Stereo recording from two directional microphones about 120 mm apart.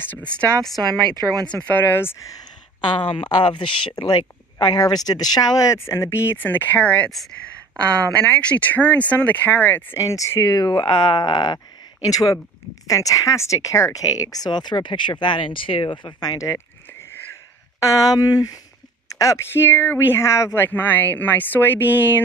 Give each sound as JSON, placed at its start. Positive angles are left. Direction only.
{"t": 0.0, "sound": "speech", "side_deg": 15}
{"t": 0.8, "sound": "speech", "side_deg": -35}
{"t": 1.5, "sound": "speech", "side_deg": 10}
{"t": 2.8, "sound": "speech", "side_deg": 45}
{"t": 17.7, "sound": "speech", "side_deg": 25}